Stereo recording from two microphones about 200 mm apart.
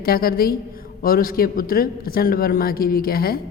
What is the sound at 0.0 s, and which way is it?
A man's voice, 50° left (ahead or behind).